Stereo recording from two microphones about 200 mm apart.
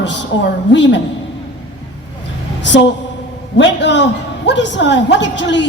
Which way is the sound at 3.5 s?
65° left (ahead or behind).